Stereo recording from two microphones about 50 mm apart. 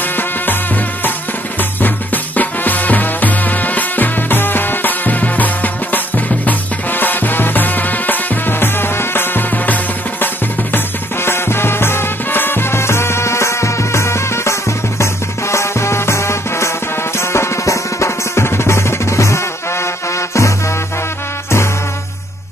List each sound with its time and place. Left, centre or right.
2.3 s music: left
11.2 s music: left